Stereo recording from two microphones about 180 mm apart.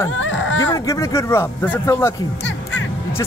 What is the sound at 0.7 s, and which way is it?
Speech, 15° left (ahead or behind).